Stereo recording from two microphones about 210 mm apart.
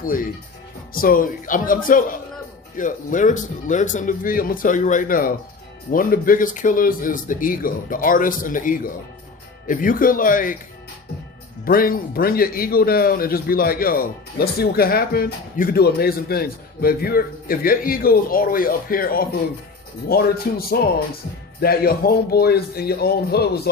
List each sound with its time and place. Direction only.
0.9 s speech: 40° left (ahead or behind)
11.6 s speech: 45° left (ahead or behind)